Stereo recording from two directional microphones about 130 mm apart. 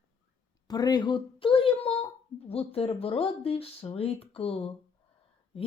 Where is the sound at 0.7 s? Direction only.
30° left (ahead or behind).